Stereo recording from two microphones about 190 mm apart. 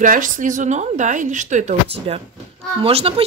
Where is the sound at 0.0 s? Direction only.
45° right (ahead or behind).